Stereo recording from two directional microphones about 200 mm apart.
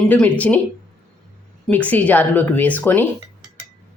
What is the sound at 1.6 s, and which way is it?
Speech, 5° left (ahead or behind).